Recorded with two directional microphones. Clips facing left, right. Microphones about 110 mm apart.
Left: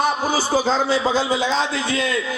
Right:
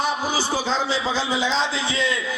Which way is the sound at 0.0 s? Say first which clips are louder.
Left 3 dB; 50° left (ahead or behind).